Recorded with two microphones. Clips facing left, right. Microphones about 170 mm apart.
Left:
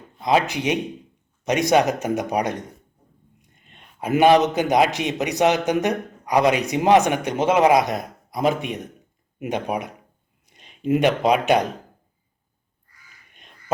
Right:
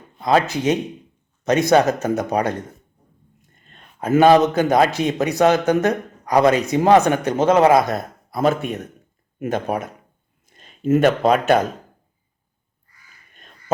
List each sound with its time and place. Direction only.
0.2 s a man's voice: 15° left (ahead or behind)
3.4 s whispering: 10° left (ahead or behind)
4.0 s a man's voice: 15° left (ahead or behind)
9.4 s a man's voice: 15° left (ahead or behind)
10.5 s a sound: 45° right (ahead or behind)
10.8 s a man's voice: 15° left (ahead or behind)